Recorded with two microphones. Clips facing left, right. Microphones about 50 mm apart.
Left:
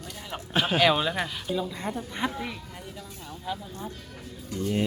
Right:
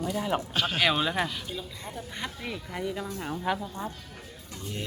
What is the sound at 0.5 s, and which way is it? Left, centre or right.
Music, left.